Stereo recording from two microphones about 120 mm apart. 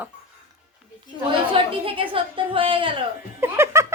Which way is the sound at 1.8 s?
50° right (ahead or behind).